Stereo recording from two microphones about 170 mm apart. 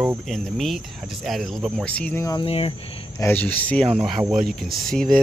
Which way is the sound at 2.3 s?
35° left (ahead or behind).